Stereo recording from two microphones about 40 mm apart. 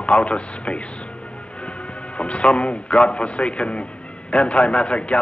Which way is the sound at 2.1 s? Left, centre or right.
Left.